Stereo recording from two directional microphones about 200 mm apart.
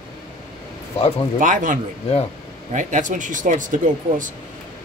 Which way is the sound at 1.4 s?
40° right (ahead or behind).